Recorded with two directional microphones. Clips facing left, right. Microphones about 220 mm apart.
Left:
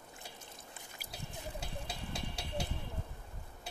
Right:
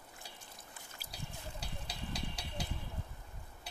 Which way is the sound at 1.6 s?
25° left (ahead or behind).